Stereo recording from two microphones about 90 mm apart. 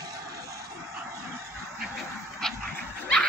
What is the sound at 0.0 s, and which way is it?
Vehicle, 40° right (ahead or behind).